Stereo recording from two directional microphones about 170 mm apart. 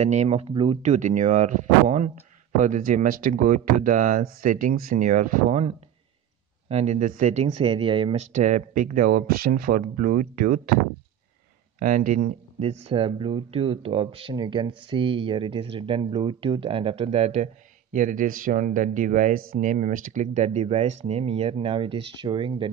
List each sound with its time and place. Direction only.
0.0 s speech: 40° right (ahead or behind)
0.8 s speech: 45° right (ahead or behind)
6.7 s speech: 40° right (ahead or behind); by 10.7 s 55° right (ahead or behind)
11.8 s speech: 50° right (ahead or behind)
17.9 s speech: 50° right (ahead or behind); by 22.7 s 30° right (ahead or behind)